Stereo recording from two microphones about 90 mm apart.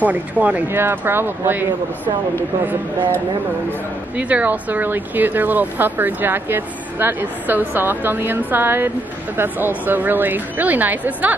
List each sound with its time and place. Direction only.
0.0 s speech: 15° right (ahead or behind)
4.2 s speech: 15° right (ahead or behind)